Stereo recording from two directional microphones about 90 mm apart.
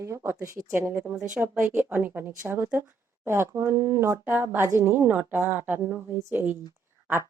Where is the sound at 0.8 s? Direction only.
25° right (ahead or behind).